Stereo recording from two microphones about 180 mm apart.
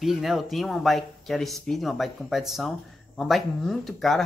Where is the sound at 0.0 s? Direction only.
Centre (ahead or behind).